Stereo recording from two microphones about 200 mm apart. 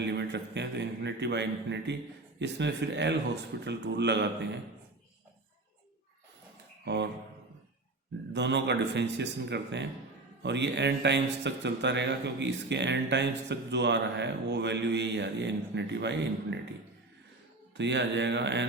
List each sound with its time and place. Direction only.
0.0 s a man's voice: 60° right (ahead or behind)
6.8 s speech: 60° right (ahead or behind)
8.3 s a man's voice: 60° right (ahead or behind)
17.7 s a man's voice: 60° right (ahead or behind)